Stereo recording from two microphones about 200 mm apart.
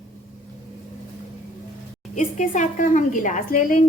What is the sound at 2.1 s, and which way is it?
A woman's voice, 40° left (ahead or behind).